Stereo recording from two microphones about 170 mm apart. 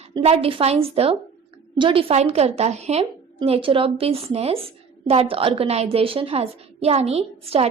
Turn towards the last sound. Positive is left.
turn(degrees=-35)  # may be behind; listen again after turning